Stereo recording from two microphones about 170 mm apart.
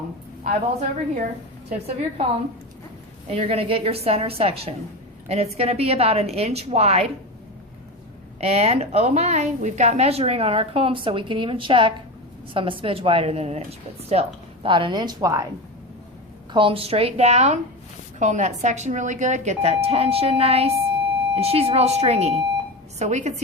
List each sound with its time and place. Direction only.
0.4 s speech: 50° right (ahead or behind)
3.2 s a woman's voice: 35° right (ahead or behind)
8.4 s a woman's voice: 35° right (ahead or behind); by 15.4 s 20° right (ahead or behind)
16.5 s a woman's voice: 30° right (ahead or behind)